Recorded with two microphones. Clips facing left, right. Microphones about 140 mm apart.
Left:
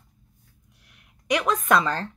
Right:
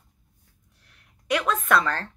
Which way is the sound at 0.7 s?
15° left (ahead or behind).